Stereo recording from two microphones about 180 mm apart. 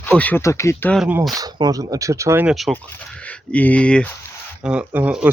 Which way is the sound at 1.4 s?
20° right (ahead or behind).